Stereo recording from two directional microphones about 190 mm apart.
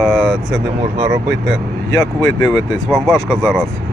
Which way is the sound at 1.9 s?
20° left (ahead or behind).